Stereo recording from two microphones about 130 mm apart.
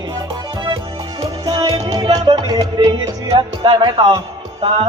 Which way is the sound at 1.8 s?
30° right (ahead or behind).